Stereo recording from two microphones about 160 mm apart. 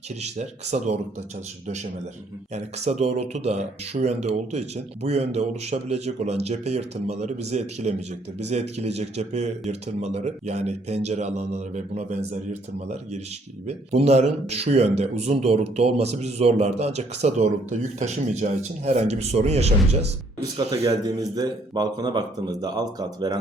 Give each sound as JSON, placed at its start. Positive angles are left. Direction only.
{"t": 0.2, "sound": "a man's voice", "side_deg": -45}
{"t": 13.7, "sound": "a man's voice", "side_deg": -40}
{"t": 20.6, "sound": "a man's voice", "side_deg": -25}